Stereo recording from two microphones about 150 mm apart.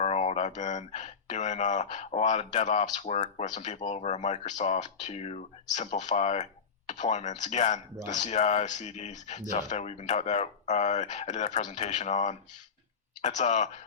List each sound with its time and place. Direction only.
0.0 s speech: 45° left (ahead or behind)